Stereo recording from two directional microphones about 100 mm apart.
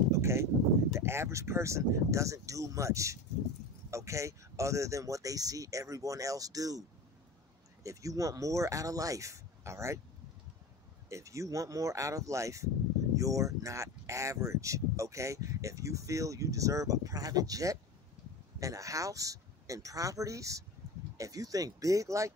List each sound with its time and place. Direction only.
0.1 s a sound: 30° right (ahead or behind)
0.9 s speech: 25° right (ahead or behind)
7.8 s speech: 35° right (ahead or behind)
11.1 s speech: 30° right (ahead or behind)